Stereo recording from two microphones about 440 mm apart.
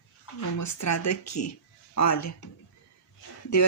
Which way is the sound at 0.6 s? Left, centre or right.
Left.